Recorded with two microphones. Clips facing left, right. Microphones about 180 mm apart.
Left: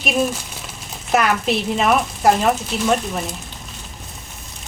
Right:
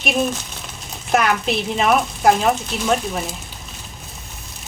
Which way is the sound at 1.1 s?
Centre (ahead or behind).